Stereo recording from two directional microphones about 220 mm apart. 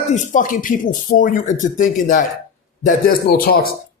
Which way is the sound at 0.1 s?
35° left (ahead or behind).